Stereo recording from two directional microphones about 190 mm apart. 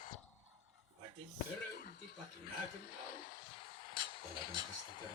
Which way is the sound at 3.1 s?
45° left (ahead or behind).